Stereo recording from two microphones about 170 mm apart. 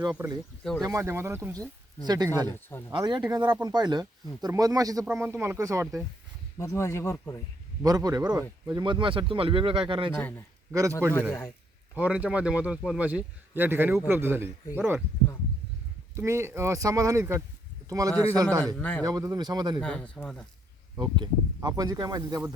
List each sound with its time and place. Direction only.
0.2 s speech: 15° right (ahead or behind)
2.5 s speech: 15° left (ahead or behind)
2.9 s speech: 25° right (ahead or behind)
6.6 s speech: 15° left (ahead or behind)
7.8 s speech: 20° right (ahead or behind)
10.2 s speech: 10° left (ahead or behind)
10.7 s a man's voice: 20° right (ahead or behind)
11.9 s speech: 10° right (ahead or behind)
16.1 s speech: 15° right (ahead or behind)
18.8 s speech: 10° left (ahead or behind)
19.0 s speech: 20° right (ahead or behind)
19.8 s speech: 5° left (ahead or behind)
21.0 s speech: 25° right (ahead or behind)